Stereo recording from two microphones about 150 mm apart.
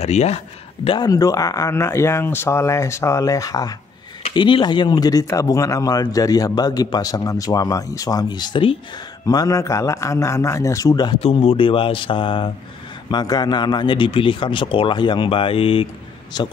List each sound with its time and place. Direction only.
0.0 s speech: 45° left (ahead or behind)
0.8 s speech: 30° left (ahead or behind)
11.1 s a man's voice: 40° left (ahead or behind)